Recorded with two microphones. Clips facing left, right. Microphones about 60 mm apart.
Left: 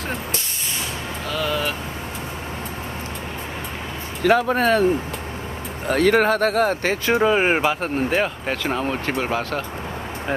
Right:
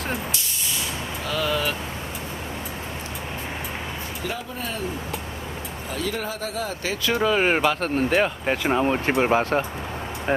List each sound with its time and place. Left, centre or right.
1.3 s vehicle: centre
4.2 s speech: left
5.9 s speech: left
7.1 s speech: left; by 8.3 s centre
8.4 s speech: centre